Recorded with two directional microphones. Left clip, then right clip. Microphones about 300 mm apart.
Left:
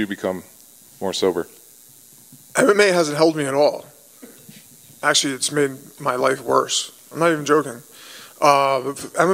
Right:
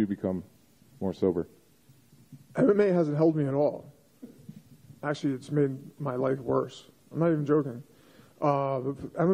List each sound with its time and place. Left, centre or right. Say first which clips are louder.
0.0 s a man's voice: left 7 dB; centre
2.5 s a man's voice: left 9 dB; centre
3.7 s a sound: left 10 dB; centre
5.0 s a man's voice: left 13 dB; centre